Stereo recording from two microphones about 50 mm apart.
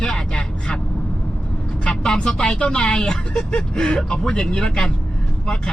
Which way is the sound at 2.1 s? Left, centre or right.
Centre.